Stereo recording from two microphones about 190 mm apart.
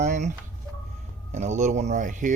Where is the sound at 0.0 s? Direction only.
40° right (ahead or behind).